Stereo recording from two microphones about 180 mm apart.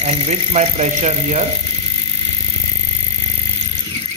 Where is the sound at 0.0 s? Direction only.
40° right (ahead or behind).